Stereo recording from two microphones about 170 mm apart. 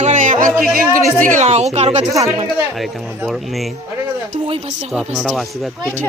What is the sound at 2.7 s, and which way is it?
Speech, centre (ahead or behind).